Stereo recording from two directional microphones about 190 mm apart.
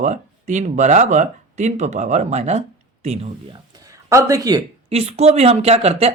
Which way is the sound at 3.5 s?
20° right (ahead or behind).